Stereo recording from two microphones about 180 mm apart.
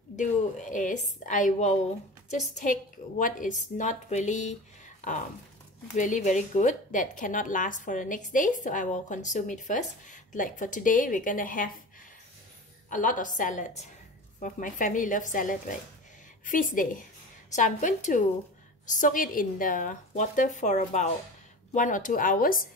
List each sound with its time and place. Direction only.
0.1 s a woman's voice: 45° left (ahead or behind)
12.9 s a woman's voice: 45° left (ahead or behind)